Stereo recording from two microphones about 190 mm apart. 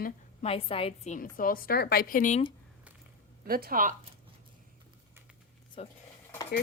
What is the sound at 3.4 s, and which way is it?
Speech, 50° right (ahead or behind).